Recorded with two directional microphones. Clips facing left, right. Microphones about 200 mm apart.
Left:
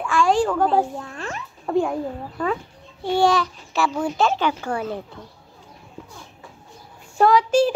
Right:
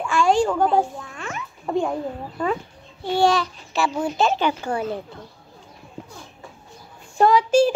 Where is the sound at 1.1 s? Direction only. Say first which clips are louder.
Left 1 dB; 35° left (ahead or behind).